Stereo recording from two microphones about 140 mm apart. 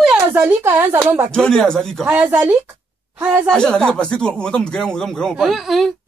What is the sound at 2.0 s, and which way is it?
Speech, 10° right (ahead or behind).